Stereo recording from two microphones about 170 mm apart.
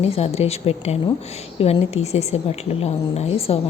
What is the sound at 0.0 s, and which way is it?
Speech, 35° left (ahead or behind).